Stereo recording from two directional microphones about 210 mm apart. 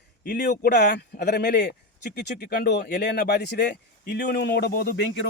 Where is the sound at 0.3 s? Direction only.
45° left (ahead or behind).